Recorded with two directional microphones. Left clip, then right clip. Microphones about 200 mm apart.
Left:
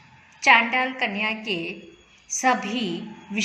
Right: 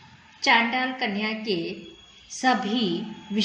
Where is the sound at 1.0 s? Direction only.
15° left (ahead or behind).